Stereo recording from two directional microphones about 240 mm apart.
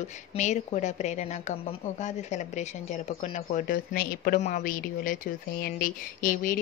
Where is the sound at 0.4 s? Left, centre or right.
Left.